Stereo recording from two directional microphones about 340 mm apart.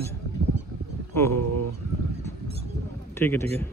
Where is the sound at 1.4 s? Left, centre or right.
Right.